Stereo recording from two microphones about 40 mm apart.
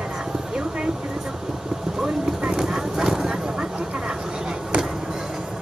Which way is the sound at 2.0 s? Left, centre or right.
Centre.